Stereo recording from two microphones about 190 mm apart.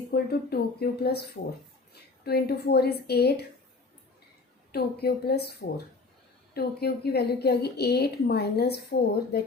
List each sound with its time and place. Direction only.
0.1 s a woman's voice: 55° left (ahead or behind)
4.7 s a woman's voice: 55° left (ahead or behind)